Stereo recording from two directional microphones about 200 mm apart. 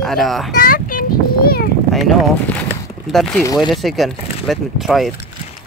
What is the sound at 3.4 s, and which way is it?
Speech, 20° left (ahead or behind).